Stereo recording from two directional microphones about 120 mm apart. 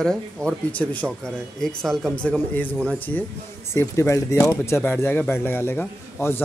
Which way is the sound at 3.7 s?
25° left (ahead or behind).